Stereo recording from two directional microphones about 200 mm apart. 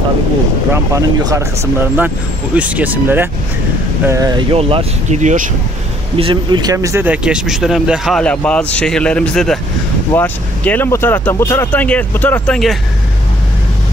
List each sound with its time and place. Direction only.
0.9 s speech: 15° right (ahead or behind); by 5.4 s 35° right (ahead or behind)
6.1 s speech: 25° right (ahead or behind); by 12.7 s 5° left (ahead or behind)